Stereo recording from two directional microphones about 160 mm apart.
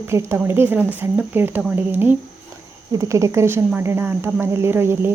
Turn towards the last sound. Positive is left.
turn(degrees=-15)  # may be behind; listen again after turning